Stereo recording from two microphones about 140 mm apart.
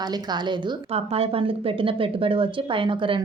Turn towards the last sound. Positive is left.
turn(degrees=-35)  # may be behind; listen again after turning